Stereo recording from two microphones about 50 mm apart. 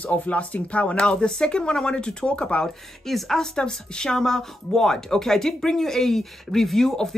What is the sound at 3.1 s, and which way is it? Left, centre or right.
Speech, centre.